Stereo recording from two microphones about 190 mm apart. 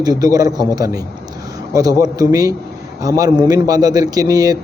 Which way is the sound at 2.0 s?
20° right (ahead or behind).